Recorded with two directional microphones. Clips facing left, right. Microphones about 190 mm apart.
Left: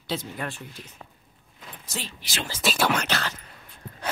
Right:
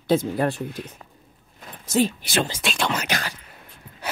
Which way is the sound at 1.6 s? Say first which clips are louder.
Right 16 dB; 45° right (ahead or behind).